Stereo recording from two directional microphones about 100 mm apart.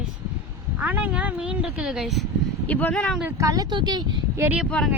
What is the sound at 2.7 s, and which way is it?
Speech, 15° left (ahead or behind).